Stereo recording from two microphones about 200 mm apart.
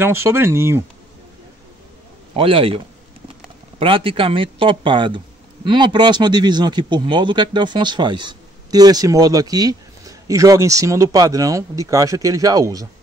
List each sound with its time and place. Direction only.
0.0 s speech: 10° right (ahead or behind)
2.3 s speech: 25° right (ahead or behind)
3.8 s speech: 25° right (ahead or behind)